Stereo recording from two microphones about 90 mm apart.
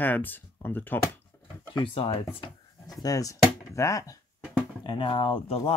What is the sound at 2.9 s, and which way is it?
Speech, 40° left (ahead or behind).